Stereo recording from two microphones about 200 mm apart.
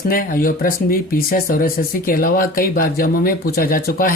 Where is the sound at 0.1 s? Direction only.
45° left (ahead or behind).